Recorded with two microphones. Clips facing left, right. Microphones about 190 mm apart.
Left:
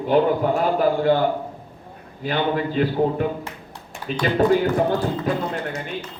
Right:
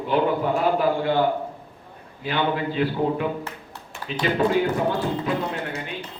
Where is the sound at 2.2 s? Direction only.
45° left (ahead or behind).